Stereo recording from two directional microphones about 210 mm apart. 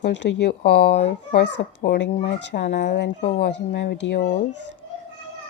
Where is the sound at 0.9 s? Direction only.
30° left (ahead or behind).